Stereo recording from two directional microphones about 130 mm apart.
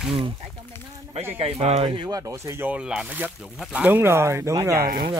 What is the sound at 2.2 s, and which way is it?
Speech, 20° right (ahead or behind).